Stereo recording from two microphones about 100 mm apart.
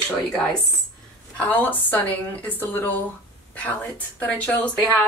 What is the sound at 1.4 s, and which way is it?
Speech, 15° left (ahead or behind).